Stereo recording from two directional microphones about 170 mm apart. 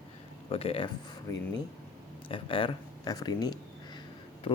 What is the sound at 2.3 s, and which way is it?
Speech, 30° left (ahead or behind).